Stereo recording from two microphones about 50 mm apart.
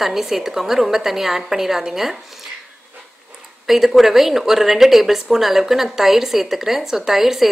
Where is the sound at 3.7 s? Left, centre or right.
Centre.